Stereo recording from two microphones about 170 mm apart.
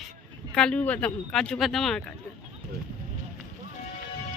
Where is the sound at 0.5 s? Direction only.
5° left (ahead or behind).